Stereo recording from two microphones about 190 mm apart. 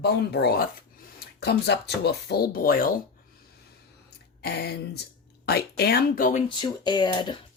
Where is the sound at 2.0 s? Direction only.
60° left (ahead or behind).